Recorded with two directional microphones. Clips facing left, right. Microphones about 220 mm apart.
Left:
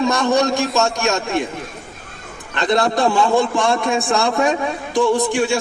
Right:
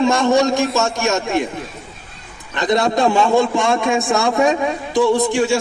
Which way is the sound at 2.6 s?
20° right (ahead or behind).